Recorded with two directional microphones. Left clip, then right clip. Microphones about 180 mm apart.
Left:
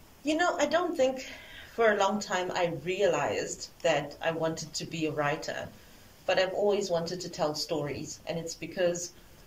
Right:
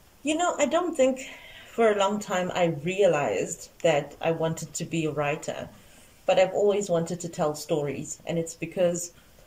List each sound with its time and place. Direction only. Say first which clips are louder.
0.2 s speech: right 2 dB; 20° right (ahead or behind)